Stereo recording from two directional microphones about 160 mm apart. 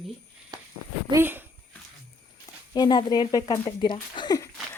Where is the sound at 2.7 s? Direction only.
25° left (ahead or behind).